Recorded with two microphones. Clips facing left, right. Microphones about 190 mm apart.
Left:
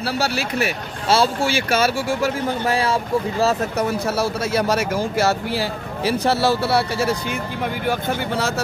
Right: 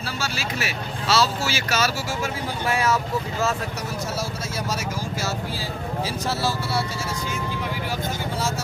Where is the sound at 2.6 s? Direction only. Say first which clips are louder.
Even; 30° left (ahead or behind).